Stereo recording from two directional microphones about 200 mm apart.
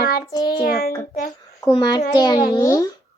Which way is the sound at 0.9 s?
20° left (ahead or behind).